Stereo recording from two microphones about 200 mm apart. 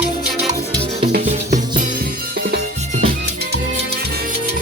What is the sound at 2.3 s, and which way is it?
Music, 50° right (ahead or behind).